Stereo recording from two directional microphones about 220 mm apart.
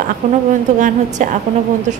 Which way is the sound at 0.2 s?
35° right (ahead or behind).